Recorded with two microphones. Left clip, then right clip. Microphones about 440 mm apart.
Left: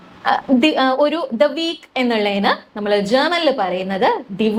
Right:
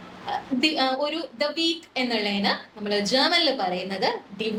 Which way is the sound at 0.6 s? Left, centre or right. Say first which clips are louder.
Left 5 dB; left.